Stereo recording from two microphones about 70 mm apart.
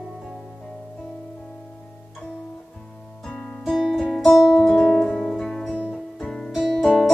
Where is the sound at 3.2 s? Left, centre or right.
Centre.